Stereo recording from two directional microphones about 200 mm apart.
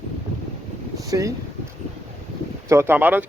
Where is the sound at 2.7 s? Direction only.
10° right (ahead or behind).